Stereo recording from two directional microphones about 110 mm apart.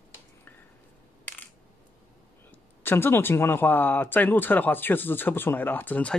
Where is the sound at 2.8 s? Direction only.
20° left (ahead or behind).